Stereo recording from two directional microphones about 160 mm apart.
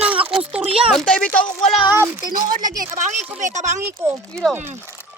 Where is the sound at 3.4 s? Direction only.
50° right (ahead or behind).